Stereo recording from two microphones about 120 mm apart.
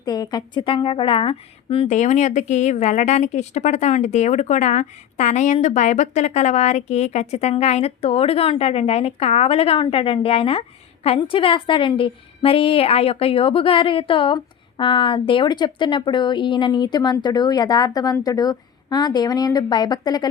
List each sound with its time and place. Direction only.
0.0 s a woman's voice: 35° left (ahead or behind); by 1.9 s 50° left (ahead or behind)
1.9 s a woman's voice: 85° left; by 20.2 s 35° left (ahead or behind)